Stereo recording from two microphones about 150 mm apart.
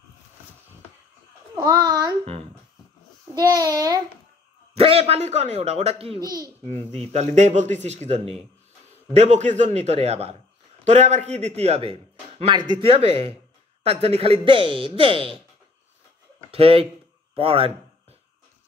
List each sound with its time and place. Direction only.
1.5 s a child's voice: 30° right (ahead or behind)
3.3 s a child's voice: 25° right (ahead or behind)
4.7 s speech: 40° right (ahead or behind)
6.2 s a child's voice: 25° right (ahead or behind)
7.1 s a man's voice: 50° right (ahead or behind)
16.4 s a man's voice: 40° right (ahead or behind)